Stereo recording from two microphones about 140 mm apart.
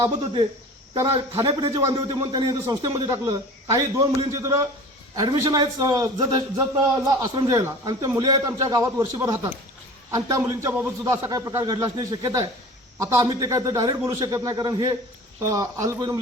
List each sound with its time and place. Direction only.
0.9 s a man's voice: 20° right (ahead or behind)
1.4 s a man's voice: 40° right (ahead or behind); by 16.2 s 20° right (ahead or behind)